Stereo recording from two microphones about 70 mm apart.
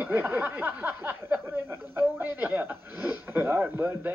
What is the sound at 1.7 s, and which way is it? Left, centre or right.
Speech, right.